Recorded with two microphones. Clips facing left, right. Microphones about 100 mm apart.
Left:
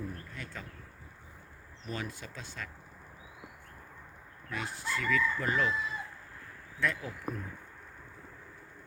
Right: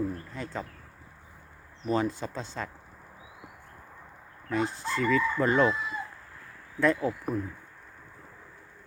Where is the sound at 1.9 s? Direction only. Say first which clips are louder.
Right 12 dB; 30° right (ahead or behind).